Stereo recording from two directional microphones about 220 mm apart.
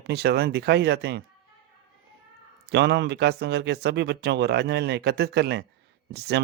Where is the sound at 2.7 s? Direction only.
50° right (ahead or behind).